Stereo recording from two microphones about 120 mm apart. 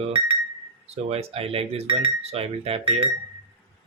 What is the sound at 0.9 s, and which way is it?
Speech, 60° right (ahead or behind).